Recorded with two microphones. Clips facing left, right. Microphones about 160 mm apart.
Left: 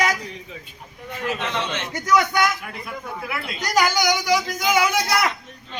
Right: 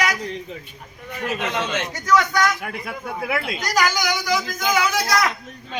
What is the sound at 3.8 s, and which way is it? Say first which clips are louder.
A woman's voice: left 3 dB; 15° left (ahead or behind).